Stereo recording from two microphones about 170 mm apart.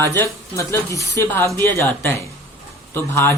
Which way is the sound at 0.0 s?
15° left (ahead or behind).